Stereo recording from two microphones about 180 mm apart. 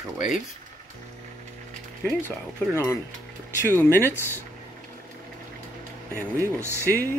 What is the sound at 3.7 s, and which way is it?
Speech, 15° left (ahead or behind).